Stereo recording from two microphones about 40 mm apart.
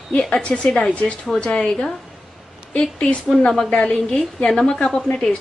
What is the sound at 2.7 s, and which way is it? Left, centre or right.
A woman's voice, left.